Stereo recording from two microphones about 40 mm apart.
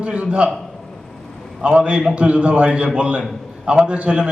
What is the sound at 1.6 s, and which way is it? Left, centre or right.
A man's voice, right.